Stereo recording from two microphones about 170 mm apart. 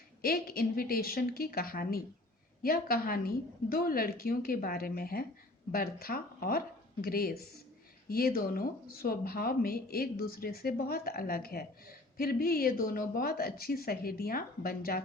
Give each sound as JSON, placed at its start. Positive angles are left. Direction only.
{"t": 0.2, "sound": "speech", "side_deg": 60}